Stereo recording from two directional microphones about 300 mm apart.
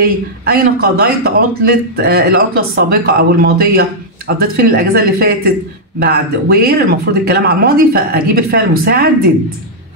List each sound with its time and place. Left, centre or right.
0.0 s a man's voice: right